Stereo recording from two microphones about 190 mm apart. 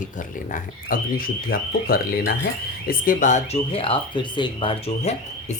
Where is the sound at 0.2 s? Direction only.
45° left (ahead or behind).